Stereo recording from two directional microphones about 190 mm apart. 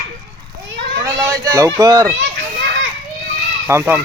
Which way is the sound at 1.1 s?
20° right (ahead or behind).